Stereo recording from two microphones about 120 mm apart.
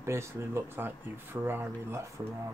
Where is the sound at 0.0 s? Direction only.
20° right (ahead or behind).